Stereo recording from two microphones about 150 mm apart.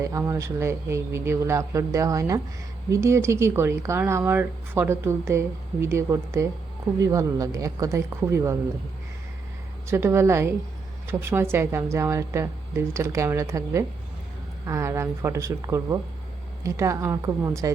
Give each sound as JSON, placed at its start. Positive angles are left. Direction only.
{"t": 0.0, "sound": "a woman's voice", "side_deg": -20}
{"t": 9.9, "sound": "a woman's voice", "side_deg": -15}